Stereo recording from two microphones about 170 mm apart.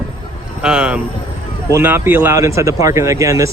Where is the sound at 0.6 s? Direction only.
5° right (ahead or behind).